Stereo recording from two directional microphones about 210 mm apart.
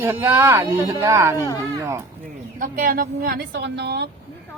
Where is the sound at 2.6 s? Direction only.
40° right (ahead or behind).